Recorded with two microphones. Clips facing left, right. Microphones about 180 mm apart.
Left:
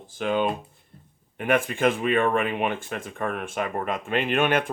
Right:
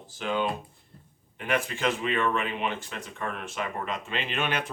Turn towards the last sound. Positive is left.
turn(degrees=55)  # may be behind; listen again after turning